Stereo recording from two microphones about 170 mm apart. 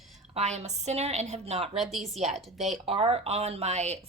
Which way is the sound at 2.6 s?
40° right (ahead or behind).